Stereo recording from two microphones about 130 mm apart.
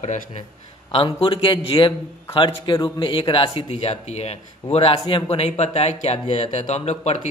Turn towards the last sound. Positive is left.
turn(degrees=55)  # may be behind; listen again after turning